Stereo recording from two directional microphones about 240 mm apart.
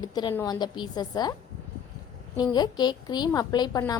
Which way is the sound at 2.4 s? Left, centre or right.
Centre.